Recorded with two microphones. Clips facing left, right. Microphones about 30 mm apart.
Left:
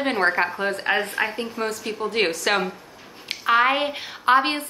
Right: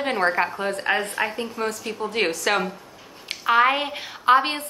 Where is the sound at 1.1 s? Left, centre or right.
Centre.